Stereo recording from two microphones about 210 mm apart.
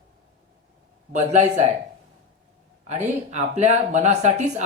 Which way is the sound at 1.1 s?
35° right (ahead or behind).